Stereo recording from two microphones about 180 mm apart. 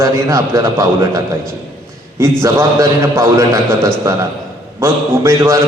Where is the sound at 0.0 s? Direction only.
20° right (ahead or behind).